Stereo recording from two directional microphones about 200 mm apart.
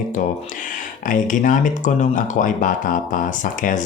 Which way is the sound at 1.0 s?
40° left (ahead or behind).